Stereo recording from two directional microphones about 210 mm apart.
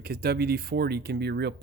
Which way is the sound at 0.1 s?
50° right (ahead or behind).